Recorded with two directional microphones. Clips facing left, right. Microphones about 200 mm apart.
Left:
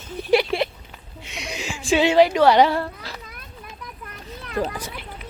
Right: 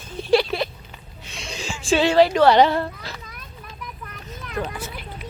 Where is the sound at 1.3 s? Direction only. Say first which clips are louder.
Left 1 dB; 20° left (ahead or behind).